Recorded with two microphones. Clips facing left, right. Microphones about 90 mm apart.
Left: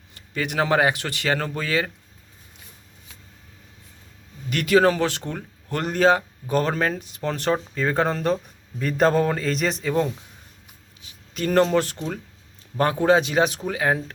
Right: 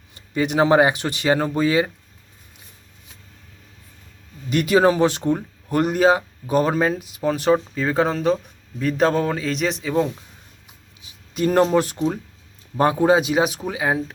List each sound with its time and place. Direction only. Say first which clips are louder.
0.1 s speech: right 6 dB; 20° right (ahead or behind)
4.4 s a man's voice: right 2 dB; 20° right (ahead or behind)
11.0 s speech: right 5 dB; 15° right (ahead or behind)